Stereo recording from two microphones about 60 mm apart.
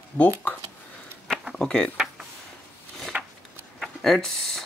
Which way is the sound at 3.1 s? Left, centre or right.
Centre.